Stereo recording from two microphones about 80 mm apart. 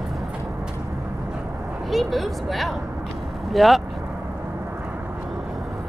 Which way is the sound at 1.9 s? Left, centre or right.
Centre.